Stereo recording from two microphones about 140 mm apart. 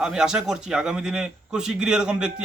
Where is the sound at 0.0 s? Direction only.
5° right (ahead or behind).